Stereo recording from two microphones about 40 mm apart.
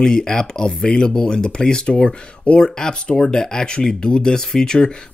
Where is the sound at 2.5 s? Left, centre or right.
Left.